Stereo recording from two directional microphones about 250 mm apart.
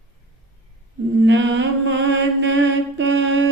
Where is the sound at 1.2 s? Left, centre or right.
Right.